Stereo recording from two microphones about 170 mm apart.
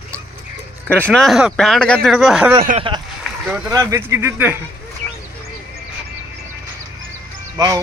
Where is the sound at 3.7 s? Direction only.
15° right (ahead or behind).